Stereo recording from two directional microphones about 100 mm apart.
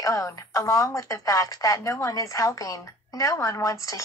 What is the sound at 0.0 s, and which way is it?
A woman's voice, 35° left (ahead or behind).